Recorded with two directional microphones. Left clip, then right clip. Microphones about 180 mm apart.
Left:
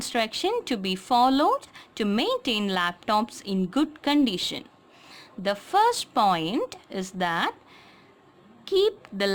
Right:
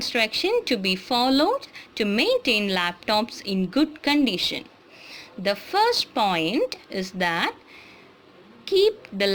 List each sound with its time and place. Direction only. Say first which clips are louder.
0.1 s a woman's voice: right 3 dB; 35° left (ahead or behind)
8.6 s a woman's voice: right 3 dB; 35° left (ahead or behind)